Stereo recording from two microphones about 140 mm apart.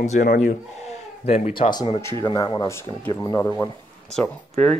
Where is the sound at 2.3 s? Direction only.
30° left (ahead or behind).